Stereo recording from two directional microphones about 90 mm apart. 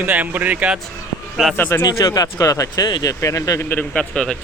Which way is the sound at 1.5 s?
25° left (ahead or behind).